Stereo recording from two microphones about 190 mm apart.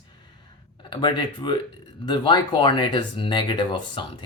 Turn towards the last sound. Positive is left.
turn(degrees=25)  # may be behind; listen again after turning